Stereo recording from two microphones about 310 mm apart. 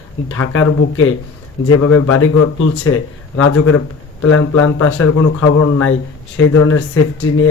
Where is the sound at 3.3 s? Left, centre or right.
Left.